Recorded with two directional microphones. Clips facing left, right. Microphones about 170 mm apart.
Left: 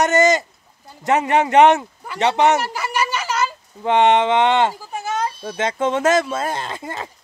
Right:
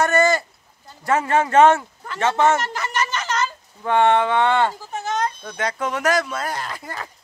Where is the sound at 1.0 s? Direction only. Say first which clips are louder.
Left 2 dB; 20° left (ahead or behind).